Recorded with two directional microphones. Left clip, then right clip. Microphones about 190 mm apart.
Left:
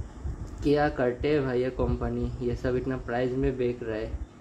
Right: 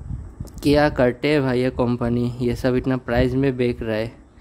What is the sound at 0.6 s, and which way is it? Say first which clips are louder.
A man's voice: right 8 dB; 60° right (ahead or behind).